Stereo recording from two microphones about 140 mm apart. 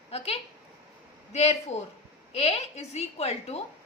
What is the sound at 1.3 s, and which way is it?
A woman's voice, 50° left (ahead or behind).